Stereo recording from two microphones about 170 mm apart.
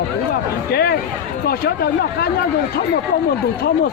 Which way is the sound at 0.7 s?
65° left (ahead or behind).